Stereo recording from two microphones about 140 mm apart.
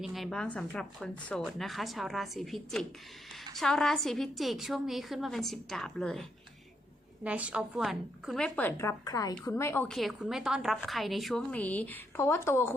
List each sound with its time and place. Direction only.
0.0 s speech: centre (ahead or behind)
7.3 s a woman's voice: 10° right (ahead or behind); by 9.9 s 15° left (ahead or behind)
9.9 s speech: centre (ahead or behind); by 12.7 s 15° left (ahead or behind)